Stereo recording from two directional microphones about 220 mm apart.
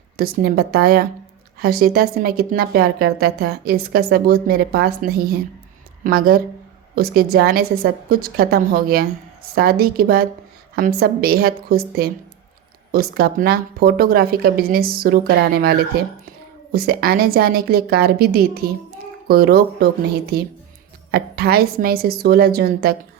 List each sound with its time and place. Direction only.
0.2 s a woman's voice: 45° right (ahead or behind)
16.7 s a woman's voice: 45° right (ahead or behind)